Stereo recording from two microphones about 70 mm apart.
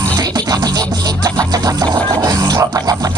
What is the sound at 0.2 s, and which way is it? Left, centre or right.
Music, right.